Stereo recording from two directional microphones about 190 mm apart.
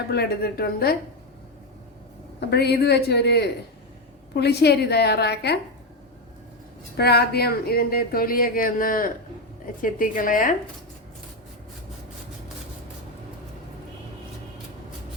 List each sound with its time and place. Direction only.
0.1 s a woman's voice: 55° left (ahead or behind)
2.5 s a woman's voice: 60° left (ahead or behind)
6.9 s speech: 55° left (ahead or behind)